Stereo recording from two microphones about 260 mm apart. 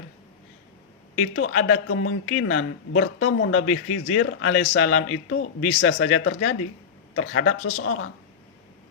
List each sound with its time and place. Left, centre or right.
1.1 s speech: left